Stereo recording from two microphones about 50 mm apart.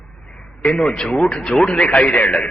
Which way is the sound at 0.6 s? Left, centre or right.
Centre.